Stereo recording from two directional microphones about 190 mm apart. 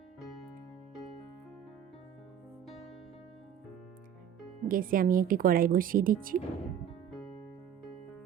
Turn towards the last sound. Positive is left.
turn(degrees=-45)  # may be behind; listen again after turning